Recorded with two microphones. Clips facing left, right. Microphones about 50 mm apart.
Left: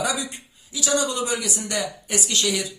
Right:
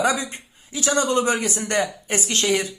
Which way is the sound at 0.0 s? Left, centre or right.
Right.